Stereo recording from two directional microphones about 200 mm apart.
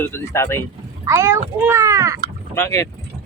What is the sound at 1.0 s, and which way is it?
A child's voice, 15° right (ahead or behind).